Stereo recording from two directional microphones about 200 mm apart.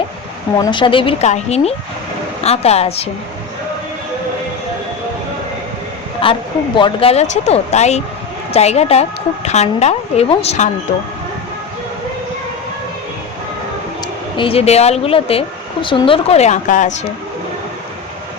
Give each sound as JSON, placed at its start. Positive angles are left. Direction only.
{"t": 0.6, "sound": "a woman's voice", "side_deg": 25}
{"t": 6.2, "sound": "a woman's voice", "side_deg": 25}
{"t": 14.3, "sound": "speech", "side_deg": 30}